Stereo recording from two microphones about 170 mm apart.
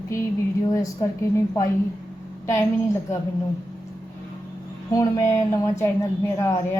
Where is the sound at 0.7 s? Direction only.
20° left (ahead or behind).